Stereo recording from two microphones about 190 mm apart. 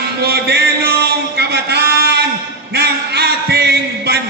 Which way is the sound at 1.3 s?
60° right (ahead or behind).